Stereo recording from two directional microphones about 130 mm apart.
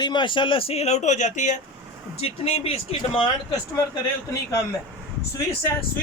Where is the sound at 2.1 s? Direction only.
50° left (ahead or behind).